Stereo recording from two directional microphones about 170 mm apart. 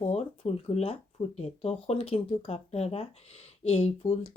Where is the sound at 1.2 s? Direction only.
35° left (ahead or behind).